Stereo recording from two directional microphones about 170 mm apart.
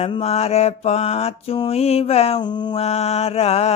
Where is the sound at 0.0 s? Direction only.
35° left (ahead or behind).